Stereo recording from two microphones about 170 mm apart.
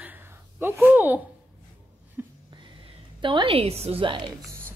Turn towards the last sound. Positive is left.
turn(degrees=-30)  # may be behind; listen again after turning